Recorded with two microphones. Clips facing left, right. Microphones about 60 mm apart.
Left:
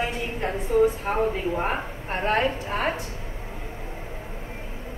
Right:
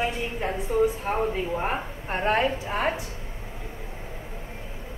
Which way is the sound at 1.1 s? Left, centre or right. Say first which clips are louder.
Left 1 dB; left.